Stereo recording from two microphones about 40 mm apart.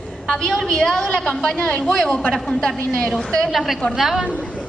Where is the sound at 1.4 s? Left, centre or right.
Left.